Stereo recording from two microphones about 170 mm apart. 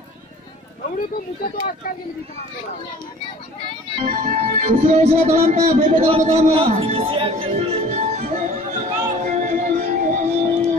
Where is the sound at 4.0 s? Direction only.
50° right (ahead or behind).